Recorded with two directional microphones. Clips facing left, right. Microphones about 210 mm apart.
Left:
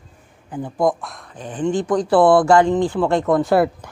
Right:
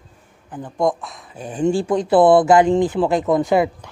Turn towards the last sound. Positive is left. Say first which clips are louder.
# left 1 dB
turn(degrees=0)  # may be behind; listen again after turning